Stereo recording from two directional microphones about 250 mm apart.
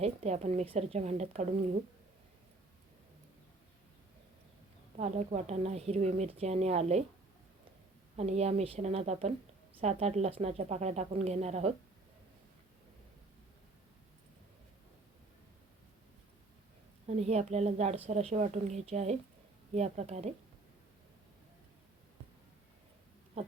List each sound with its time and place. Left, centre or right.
0.0 s speech: right
4.9 s speech: right
8.1 s speech: right
17.1 s speech: right